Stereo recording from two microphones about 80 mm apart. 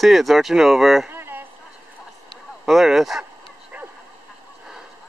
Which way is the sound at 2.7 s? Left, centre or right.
Centre.